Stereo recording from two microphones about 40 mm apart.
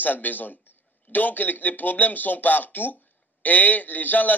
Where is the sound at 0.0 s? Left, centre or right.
Left.